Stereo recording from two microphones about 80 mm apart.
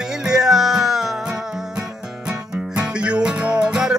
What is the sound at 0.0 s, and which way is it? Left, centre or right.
Music, centre.